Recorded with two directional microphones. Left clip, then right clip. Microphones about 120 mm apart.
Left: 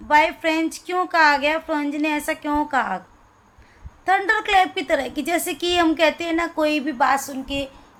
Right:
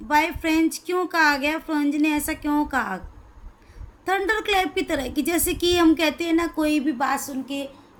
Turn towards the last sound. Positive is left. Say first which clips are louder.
# left 4 dB
turn(degrees=-15)  # may be behind; listen again after turning